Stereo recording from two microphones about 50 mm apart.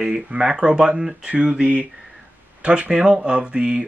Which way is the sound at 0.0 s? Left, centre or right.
Centre.